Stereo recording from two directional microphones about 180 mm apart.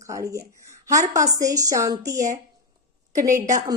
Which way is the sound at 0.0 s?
15° right (ahead or behind).